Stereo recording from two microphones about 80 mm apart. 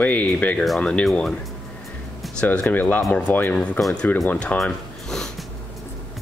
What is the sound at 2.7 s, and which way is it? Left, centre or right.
Speech, left.